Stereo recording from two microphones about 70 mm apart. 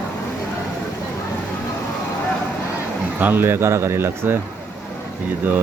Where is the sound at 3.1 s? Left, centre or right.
Right.